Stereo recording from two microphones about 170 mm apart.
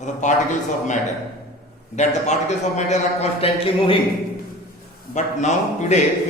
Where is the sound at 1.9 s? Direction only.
45° left (ahead or behind).